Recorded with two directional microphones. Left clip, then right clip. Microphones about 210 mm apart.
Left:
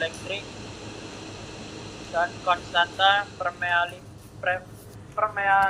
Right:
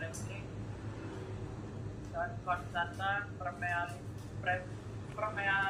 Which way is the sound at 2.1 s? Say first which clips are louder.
Left 13 dB; 40° left (ahead or behind).